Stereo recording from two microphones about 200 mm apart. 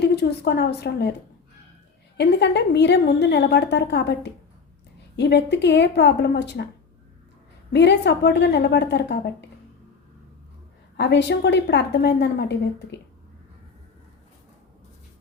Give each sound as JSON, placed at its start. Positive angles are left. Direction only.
{"t": 0.0, "sound": "a woman's voice", "side_deg": 55}
{"t": 2.1, "sound": "a woman's voice", "side_deg": 60}
{"t": 7.7, "sound": "a woman's voice", "side_deg": 60}
{"t": 10.9, "sound": "a woman's voice", "side_deg": 60}